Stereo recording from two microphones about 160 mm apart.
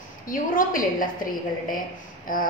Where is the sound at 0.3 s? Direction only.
60° left (ahead or behind).